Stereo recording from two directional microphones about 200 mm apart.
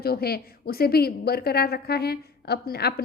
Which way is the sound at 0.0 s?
50° left (ahead or behind).